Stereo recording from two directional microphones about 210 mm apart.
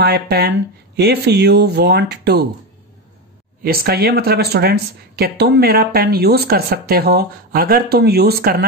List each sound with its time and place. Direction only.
0.0 s speech: 50° right (ahead or behind)
3.6 s speech: 50° right (ahead or behind)